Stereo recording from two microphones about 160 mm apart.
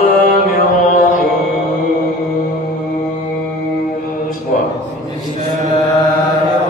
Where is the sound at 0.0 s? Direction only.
65° left (ahead or behind).